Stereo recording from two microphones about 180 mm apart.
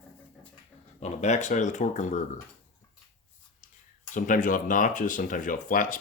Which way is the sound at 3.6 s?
40° left (ahead or behind).